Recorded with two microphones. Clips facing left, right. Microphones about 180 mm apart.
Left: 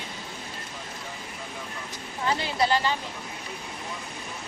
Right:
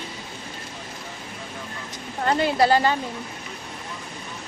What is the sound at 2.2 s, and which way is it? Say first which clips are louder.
Speech: right 6 dB; 55° right (ahead or behind).